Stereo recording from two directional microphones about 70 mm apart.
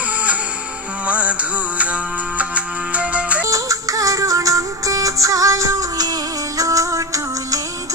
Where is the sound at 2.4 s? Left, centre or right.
Centre.